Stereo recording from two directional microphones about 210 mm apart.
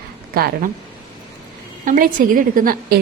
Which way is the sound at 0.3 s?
45° right (ahead or behind).